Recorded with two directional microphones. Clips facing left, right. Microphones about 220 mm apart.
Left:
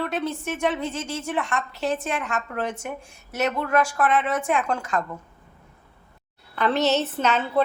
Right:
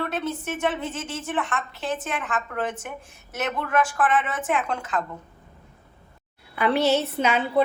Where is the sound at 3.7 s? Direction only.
40° left (ahead or behind).